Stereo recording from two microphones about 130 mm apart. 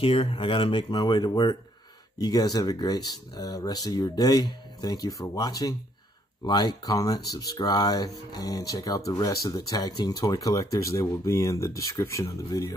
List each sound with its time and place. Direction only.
0.0 s speech: 45° left (ahead or behind); by 12.7 s 25° left (ahead or behind)